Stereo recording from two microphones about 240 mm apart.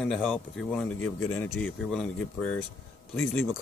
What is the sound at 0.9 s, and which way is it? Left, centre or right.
Speech, left.